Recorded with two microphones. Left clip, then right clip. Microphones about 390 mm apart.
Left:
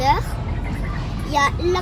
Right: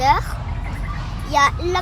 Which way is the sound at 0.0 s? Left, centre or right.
Centre.